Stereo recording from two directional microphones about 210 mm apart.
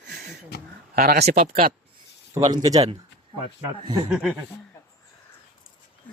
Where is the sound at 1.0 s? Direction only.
45° right (ahead or behind).